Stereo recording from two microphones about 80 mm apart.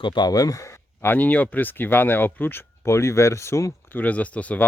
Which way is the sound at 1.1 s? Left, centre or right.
Centre.